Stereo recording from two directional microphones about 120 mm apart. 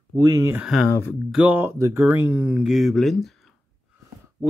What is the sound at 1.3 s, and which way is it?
Speech, 10° right (ahead or behind).